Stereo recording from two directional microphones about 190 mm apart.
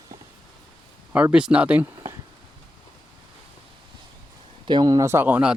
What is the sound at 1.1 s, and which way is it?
Speech, 5° right (ahead or behind).